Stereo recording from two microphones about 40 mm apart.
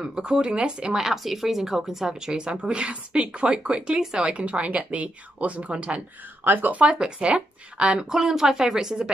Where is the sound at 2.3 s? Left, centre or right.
Right.